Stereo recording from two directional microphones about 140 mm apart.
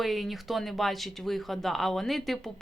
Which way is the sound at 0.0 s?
Centre (ahead or behind).